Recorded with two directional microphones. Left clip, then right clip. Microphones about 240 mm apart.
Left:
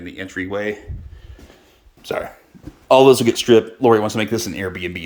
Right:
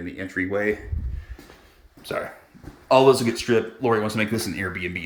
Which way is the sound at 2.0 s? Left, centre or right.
Centre.